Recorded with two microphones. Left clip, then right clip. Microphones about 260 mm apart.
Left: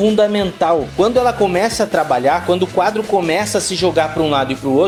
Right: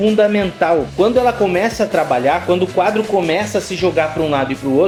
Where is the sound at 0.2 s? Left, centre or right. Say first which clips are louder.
Right 1 dB; centre.